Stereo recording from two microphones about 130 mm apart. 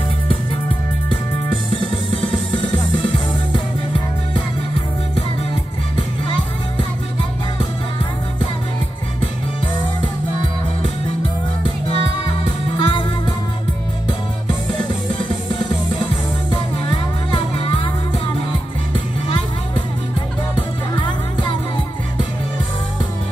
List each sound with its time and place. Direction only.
2.5 s music: 35° left (ahead or behind)
12.7 s music: 35° left (ahead or behind)
20.9 s music: 35° left (ahead or behind)